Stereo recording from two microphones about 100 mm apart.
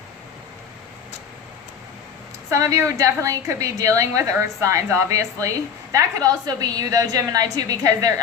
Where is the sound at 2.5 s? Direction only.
30° right (ahead or behind).